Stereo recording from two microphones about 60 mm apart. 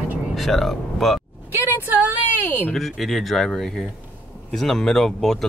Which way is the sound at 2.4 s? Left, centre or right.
Left.